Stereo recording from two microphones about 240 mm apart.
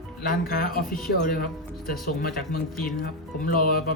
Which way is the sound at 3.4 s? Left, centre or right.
Left.